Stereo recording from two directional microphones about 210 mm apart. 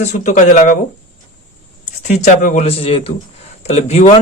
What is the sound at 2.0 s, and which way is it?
Speech, 35° left (ahead or behind).